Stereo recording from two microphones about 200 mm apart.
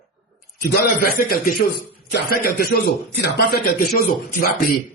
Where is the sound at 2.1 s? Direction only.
50° left (ahead or behind).